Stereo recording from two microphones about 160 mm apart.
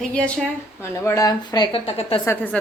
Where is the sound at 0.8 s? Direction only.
20° left (ahead or behind).